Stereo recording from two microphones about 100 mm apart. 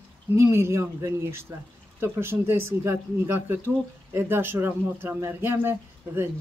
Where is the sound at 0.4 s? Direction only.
25° right (ahead or behind).